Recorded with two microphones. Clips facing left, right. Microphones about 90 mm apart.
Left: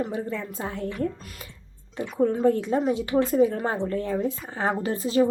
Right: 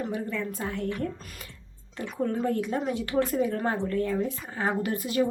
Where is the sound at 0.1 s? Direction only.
25° left (ahead or behind).